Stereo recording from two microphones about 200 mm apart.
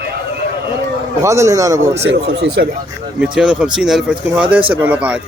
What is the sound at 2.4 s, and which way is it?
Speech, 60° right (ahead or behind).